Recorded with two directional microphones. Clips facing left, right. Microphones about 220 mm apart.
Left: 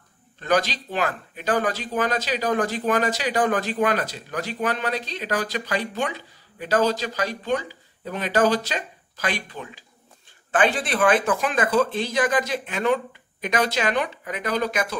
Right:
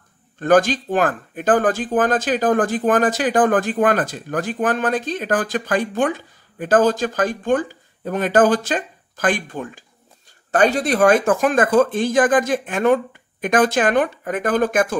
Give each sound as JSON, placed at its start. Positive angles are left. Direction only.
{"t": 0.4, "sound": "speech", "side_deg": -50}